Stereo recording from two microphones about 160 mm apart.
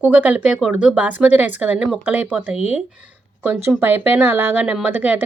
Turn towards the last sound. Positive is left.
turn(degrees=-10)  # may be behind; listen again after turning